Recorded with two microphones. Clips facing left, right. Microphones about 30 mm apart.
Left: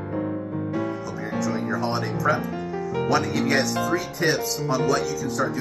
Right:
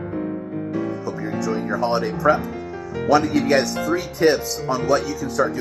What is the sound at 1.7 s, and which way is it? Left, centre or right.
Speech, right.